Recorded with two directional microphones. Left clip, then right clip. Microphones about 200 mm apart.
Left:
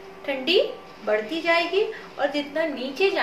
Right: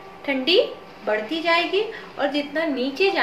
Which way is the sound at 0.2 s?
20° right (ahead or behind).